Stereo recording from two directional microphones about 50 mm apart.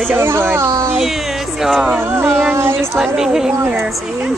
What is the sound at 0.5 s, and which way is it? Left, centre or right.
Speech, right.